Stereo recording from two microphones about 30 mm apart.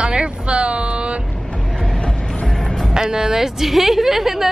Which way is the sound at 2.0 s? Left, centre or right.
Left.